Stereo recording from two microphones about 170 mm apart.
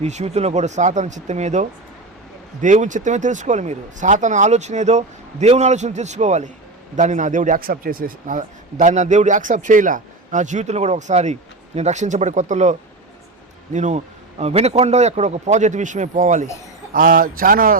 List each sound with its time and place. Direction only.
0.0 s a man's voice: 40° right (ahead or behind)
13.7 s a man's voice: 45° right (ahead or behind)
16.9 s speech: 55° right (ahead or behind)